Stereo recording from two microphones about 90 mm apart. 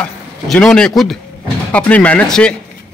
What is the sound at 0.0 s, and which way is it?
A man's voice, 10° left (ahead or behind).